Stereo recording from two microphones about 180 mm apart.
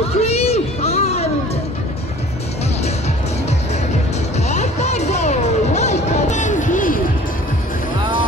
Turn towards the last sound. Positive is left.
turn(degrees=45)  # may be behind; listen again after turning